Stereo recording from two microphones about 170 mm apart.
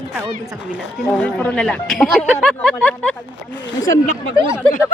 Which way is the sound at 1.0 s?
10° left (ahead or behind).